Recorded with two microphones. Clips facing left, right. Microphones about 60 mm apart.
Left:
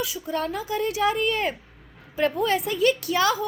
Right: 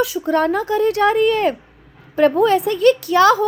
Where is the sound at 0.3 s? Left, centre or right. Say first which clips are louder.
Right 10 dB; right.